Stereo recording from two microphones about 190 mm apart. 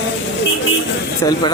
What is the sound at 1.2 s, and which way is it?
Speech, 20° left (ahead or behind).